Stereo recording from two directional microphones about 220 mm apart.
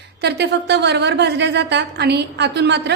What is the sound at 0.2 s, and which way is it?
A woman's voice, 50° right (ahead or behind).